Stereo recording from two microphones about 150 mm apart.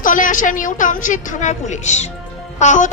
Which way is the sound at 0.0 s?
60° left (ahead or behind).